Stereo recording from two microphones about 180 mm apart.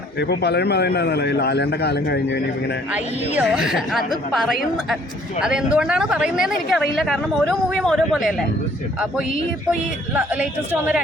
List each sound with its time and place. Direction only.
0.2 s a man's voice: 65° left (ahead or behind)
2.9 s a woman's voice: 5° right (ahead or behind)
10.2 s speech: 5° right (ahead or behind)